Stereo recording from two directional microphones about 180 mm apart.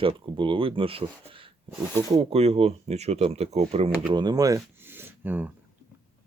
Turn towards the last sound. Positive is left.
turn(degrees=-10)  # may be behind; listen again after turning